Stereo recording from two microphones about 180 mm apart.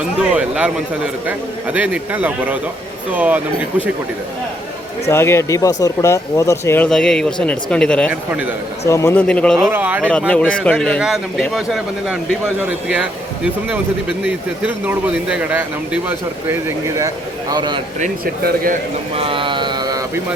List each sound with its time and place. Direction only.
0.2 s a man's voice: 5° right (ahead or behind)
5.0 s speech: 15° left (ahead or behind)
9.6 s speech: 10° right (ahead or behind)
10.1 s a man's voice: 5° left (ahead or behind); by 17.1 s 10° right (ahead or behind)
17.5 s speech: 25° right (ahead or behind)
18.4 s a man's voice: 50° right (ahead or behind)
19.1 s speech: 30° right (ahead or behind)